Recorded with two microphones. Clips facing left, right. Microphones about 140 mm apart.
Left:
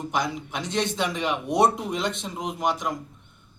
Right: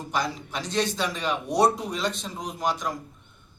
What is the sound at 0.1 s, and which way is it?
A man's voice, 20° left (ahead or behind).